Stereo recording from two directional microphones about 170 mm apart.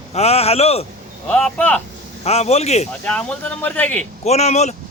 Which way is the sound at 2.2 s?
40° left (ahead or behind).